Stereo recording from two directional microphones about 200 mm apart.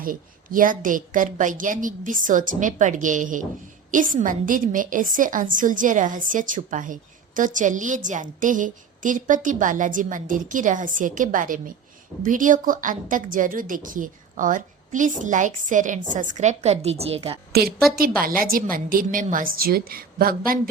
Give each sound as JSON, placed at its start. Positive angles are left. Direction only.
{"t": 0.0, "sound": "a woman's voice", "side_deg": -45}
{"t": 17.5, "sound": "a woman's voice", "side_deg": -50}